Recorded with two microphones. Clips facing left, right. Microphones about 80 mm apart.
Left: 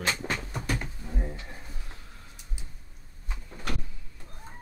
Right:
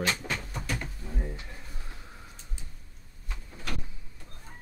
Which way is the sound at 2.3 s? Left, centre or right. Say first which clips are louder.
Even; centre.